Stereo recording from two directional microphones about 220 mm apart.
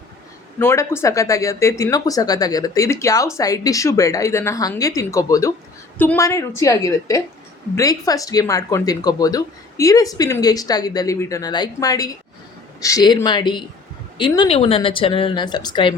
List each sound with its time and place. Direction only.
0.6 s speech: 10° left (ahead or behind)